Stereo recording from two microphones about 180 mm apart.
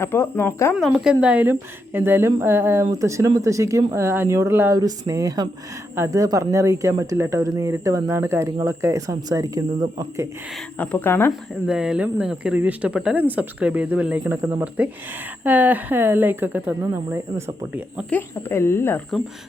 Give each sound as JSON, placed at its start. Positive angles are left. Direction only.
{"t": 0.0, "sound": "speech", "side_deg": 15}
{"t": 0.9, "sound": "speech", "side_deg": -5}
{"t": 10.8, "sound": "speech", "side_deg": 10}
{"t": 11.3, "sound": "speech", "side_deg": -5}
{"t": 18.1, "sound": "speech", "side_deg": 15}